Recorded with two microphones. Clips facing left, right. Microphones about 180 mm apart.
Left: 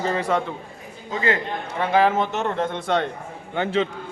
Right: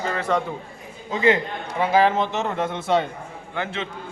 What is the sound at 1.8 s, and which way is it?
Speech, centre (ahead or behind).